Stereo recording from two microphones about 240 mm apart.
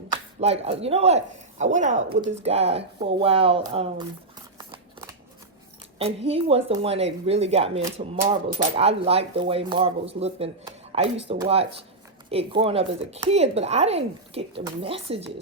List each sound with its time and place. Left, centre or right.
0.1 s speech: right
4.5 s scissors: centre
6.0 s speech: right